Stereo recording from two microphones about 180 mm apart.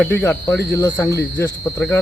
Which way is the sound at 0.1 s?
10° left (ahead or behind).